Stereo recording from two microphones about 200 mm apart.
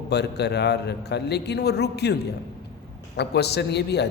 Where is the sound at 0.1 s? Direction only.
55° left (ahead or behind).